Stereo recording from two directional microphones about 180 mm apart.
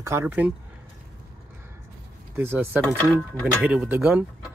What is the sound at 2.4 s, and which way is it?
Speech, 10° right (ahead or behind).